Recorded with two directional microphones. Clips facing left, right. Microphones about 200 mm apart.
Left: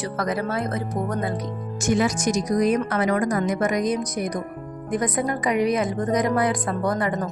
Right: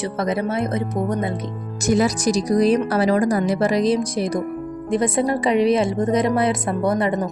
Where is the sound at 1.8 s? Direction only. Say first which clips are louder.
Right 3 dB; 35° right (ahead or behind).